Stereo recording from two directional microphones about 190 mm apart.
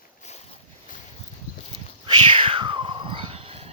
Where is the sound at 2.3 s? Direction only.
25° right (ahead or behind).